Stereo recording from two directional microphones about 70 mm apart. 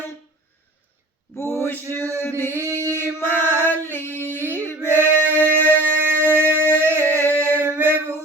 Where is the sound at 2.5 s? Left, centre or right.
Right.